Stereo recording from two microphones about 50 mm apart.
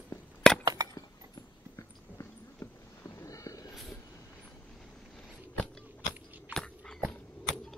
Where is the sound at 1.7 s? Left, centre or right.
Left.